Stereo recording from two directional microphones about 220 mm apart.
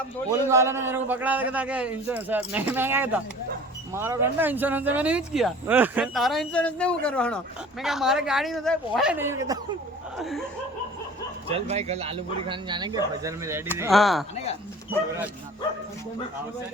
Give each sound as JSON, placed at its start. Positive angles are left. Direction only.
{"t": 0.3, "sound": "a man's voice", "side_deg": -15}
{"t": 10.2, "sound": "speech", "side_deg": 0}
{"t": 11.4, "sound": "speech", "side_deg": -25}
{"t": 13.9, "sound": "speech", "side_deg": 0}